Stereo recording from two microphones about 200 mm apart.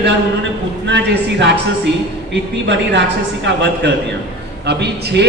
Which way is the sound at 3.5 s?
60° right (ahead or behind).